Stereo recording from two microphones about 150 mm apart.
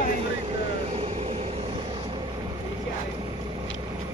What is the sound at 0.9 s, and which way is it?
Vehicle, 40° right (ahead or behind).